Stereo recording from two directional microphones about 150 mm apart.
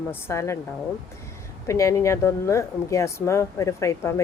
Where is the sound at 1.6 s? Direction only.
20° left (ahead or behind).